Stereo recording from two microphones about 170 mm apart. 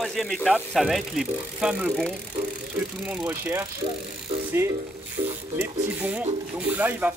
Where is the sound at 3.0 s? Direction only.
10° right (ahead or behind).